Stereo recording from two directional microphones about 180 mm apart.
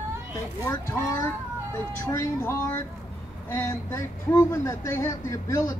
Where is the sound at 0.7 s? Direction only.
15° left (ahead or behind).